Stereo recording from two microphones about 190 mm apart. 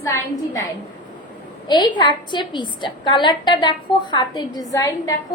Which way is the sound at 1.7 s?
25° left (ahead or behind).